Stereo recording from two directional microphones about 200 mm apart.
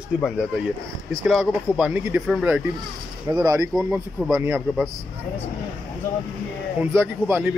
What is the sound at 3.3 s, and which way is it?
Speech, 15° right (ahead or behind).